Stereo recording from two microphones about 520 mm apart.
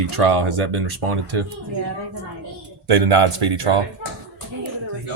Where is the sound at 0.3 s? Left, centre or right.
Right.